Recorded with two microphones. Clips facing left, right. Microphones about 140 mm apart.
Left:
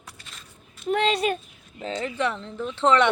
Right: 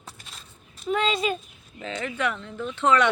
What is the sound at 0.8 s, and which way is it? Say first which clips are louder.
Speech: left 2 dB; 60° left (ahead or behind).